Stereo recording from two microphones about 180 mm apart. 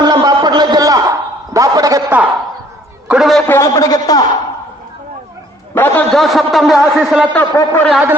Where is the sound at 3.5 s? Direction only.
15° left (ahead or behind).